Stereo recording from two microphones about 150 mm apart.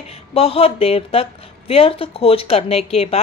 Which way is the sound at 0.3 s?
40° left (ahead or behind).